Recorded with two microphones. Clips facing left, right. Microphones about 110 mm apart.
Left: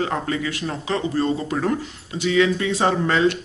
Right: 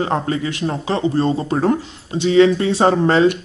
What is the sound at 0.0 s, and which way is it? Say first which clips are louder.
Speech: right 4 dB; 30° right (ahead or behind).